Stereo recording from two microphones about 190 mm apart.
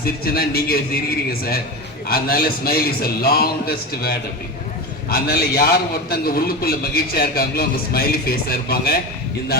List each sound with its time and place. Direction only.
0.0 s a man's voice: 55° left (ahead or behind)